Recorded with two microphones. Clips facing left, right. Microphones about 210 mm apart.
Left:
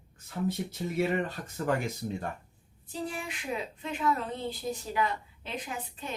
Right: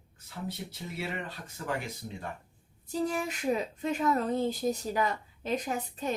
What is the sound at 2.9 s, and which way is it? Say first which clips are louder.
A woman's voice: right 5 dB; 40° right (ahead or behind).